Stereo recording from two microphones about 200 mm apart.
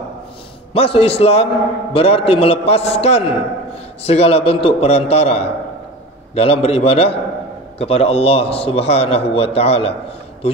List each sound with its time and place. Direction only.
0.7 s a man's voice: 30° left (ahead or behind)